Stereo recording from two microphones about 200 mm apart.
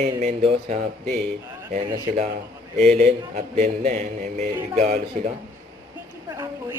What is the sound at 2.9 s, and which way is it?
A man's voice, 35° right (ahead or behind).